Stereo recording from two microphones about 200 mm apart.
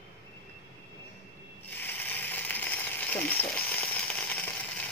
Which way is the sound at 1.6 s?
10° left (ahead or behind).